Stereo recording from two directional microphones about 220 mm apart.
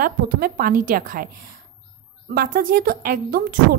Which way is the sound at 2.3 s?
40° right (ahead or behind).